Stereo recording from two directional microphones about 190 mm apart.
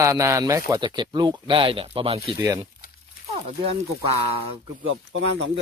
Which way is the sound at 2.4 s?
20° right (ahead or behind).